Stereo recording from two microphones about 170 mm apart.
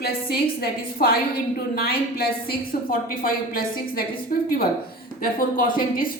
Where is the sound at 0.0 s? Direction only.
65° left (ahead or behind).